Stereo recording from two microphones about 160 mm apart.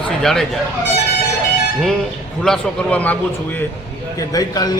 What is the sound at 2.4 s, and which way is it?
A man's voice, 5° left (ahead or behind).